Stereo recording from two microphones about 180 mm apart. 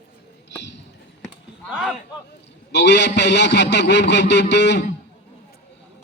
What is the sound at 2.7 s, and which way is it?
A man's voice, 75° left (ahead or behind).